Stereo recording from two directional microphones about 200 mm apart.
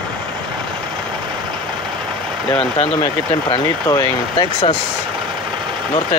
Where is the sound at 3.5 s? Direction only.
15° left (ahead or behind).